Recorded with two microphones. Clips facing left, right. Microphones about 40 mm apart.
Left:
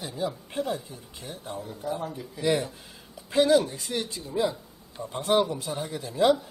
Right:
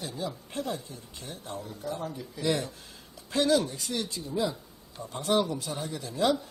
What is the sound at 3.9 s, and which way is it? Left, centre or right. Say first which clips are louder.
Speech: left 3 dB; left.